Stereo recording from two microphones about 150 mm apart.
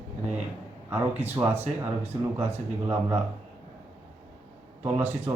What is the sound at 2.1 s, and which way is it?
Speech, 30° right (ahead or behind).